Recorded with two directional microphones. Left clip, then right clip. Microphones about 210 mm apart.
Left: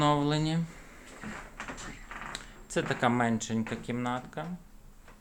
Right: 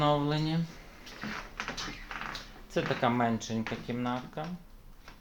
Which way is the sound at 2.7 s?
20° left (ahead or behind).